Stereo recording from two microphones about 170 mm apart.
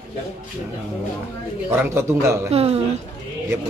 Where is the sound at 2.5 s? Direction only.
35° right (ahead or behind).